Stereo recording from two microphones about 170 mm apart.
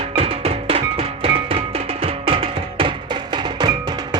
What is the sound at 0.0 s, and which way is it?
Music, 35° right (ahead or behind).